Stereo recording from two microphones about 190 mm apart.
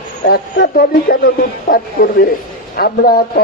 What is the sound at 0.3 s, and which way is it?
Speech, 50° left (ahead or behind).